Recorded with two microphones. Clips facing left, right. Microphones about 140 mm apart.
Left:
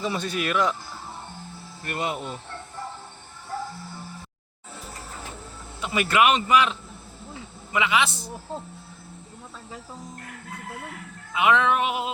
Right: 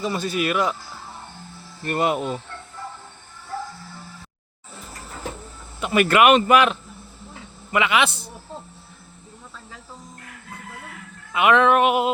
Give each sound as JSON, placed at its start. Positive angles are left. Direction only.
{"t": 0.0, "sound": "speech", "side_deg": 0}
{"t": 2.0, "sound": "speech", "side_deg": -75}
{"t": 5.8, "sound": "speech", "side_deg": -60}
{"t": 11.3, "sound": "speech", "side_deg": -60}